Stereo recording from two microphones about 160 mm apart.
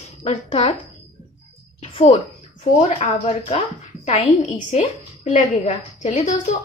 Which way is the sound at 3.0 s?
40° left (ahead or behind).